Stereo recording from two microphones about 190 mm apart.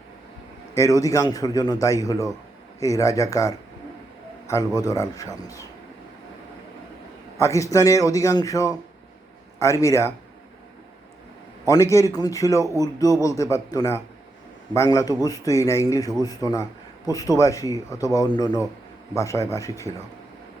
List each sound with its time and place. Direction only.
0.8 s speech: 15° left (ahead or behind)
7.3 s speech: 15° left (ahead or behind)
11.6 s a man's voice: 15° left (ahead or behind)